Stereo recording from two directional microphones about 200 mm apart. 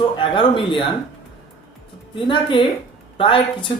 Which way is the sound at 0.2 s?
25° left (ahead or behind).